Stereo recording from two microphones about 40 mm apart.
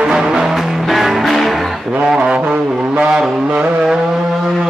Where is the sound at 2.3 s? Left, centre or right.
Right.